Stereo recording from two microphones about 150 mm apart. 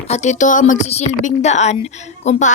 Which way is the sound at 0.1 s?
50° left (ahead or behind).